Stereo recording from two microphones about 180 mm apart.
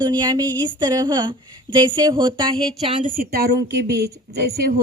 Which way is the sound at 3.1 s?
60° right (ahead or behind).